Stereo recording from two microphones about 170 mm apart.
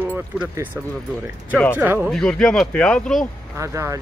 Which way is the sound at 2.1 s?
5° left (ahead or behind).